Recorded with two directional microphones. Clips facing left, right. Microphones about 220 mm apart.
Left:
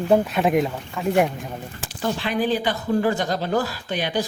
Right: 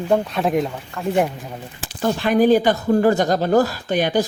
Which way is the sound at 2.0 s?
45° right (ahead or behind).